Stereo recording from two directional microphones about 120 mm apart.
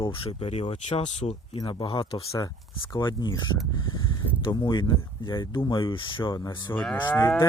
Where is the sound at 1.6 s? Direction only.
45° left (ahead or behind).